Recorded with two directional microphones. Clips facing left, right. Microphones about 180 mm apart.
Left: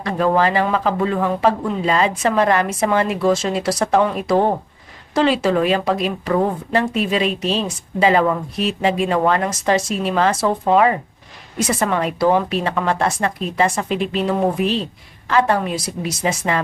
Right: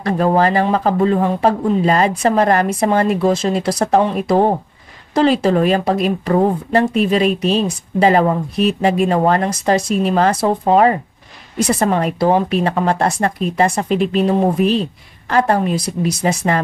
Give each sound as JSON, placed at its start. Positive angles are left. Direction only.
{"t": 0.0, "sound": "speech", "side_deg": -40}
{"t": 5.2, "sound": "speech", "side_deg": -40}